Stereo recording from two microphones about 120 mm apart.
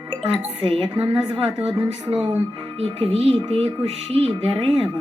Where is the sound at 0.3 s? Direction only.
45° right (ahead or behind).